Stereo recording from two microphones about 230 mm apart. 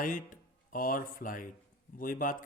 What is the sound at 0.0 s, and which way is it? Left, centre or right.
Speech, left.